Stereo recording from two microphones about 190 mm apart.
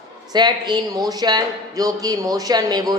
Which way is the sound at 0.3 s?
20° right (ahead or behind).